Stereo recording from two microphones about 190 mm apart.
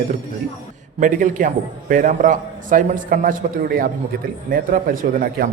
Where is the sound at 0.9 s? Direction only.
45° right (ahead or behind).